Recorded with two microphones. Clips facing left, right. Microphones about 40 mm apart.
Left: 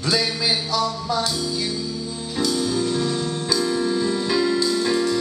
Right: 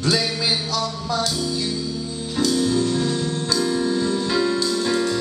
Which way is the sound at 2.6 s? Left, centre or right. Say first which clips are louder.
Right 2 dB; centre.